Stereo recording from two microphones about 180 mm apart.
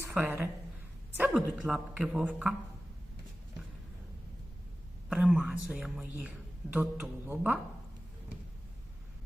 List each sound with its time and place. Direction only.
0.0 s a woman's voice: 10° right (ahead or behind)
5.0 s a woman's voice: 5° right (ahead or behind)